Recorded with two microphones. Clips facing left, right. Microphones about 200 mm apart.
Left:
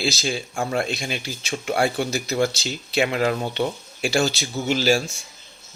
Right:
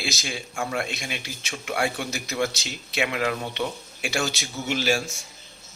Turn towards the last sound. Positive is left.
turn(degrees=35)  # may be behind; listen again after turning